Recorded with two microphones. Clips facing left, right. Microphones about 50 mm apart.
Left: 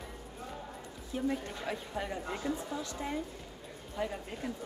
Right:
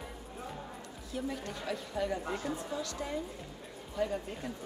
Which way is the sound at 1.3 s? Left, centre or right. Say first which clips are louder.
Left 1 dB; left.